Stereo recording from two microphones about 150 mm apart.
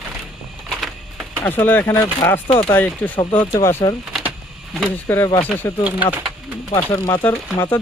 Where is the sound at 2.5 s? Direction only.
35° left (ahead or behind).